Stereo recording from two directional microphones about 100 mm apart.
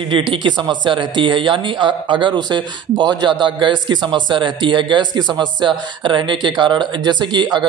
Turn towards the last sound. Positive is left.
turn(degrees=-50)  # may be behind; listen again after turning